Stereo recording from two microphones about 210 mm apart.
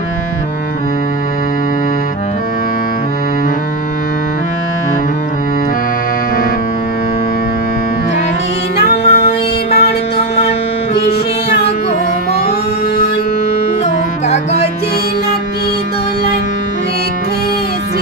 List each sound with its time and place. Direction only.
9.0 s music: 30° left (ahead or behind)
11.1 s music: 50° left (ahead or behind)